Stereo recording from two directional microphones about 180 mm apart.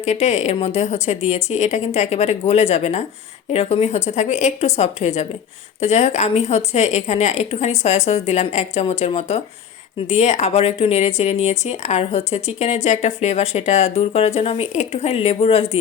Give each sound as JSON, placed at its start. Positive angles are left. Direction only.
{"t": 0.0, "sound": "speech", "side_deg": 40}